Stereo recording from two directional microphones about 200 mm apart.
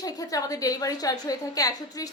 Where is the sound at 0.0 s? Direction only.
15° left (ahead or behind).